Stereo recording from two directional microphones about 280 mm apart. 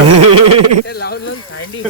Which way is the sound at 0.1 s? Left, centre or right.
Right.